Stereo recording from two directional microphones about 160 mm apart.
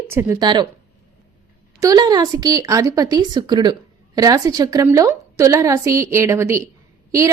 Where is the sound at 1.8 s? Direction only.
25° right (ahead or behind).